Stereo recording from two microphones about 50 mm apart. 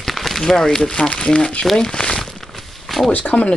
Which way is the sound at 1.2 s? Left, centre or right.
Left.